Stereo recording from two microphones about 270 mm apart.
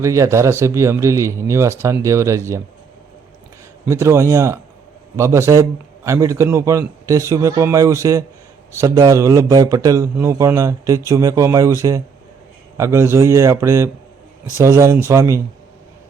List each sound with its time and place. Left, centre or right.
0.0 s a man's voice: centre
3.8 s a man's voice: centre